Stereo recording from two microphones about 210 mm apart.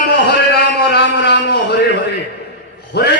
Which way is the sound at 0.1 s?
50° left (ahead or behind).